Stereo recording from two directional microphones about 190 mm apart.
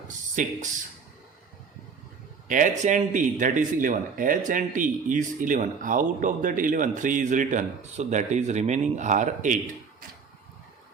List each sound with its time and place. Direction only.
0.4 s speech: 45° right (ahead or behind)
2.5 s speech: 45° right (ahead or behind)